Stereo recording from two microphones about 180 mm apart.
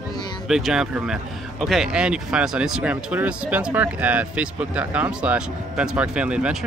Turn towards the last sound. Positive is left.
turn(degrees=-5)  # may be behind; listen again after turning